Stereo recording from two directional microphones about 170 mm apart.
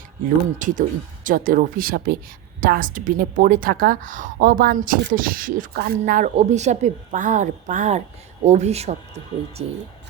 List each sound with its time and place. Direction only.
0.6 s a woman's voice: 50° right (ahead or behind)